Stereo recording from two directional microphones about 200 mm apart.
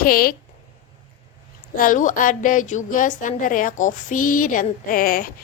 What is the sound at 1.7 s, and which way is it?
A woman's voice, 45° left (ahead or behind).